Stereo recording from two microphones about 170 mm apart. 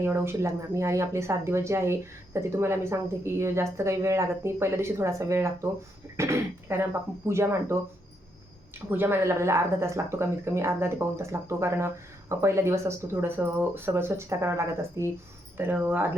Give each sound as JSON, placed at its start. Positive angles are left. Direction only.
{"t": 0.0, "sound": "speech", "side_deg": -15}
{"t": 8.9, "sound": "speech", "side_deg": -10}